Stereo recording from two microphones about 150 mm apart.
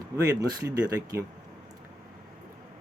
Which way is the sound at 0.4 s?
25° right (ahead or behind).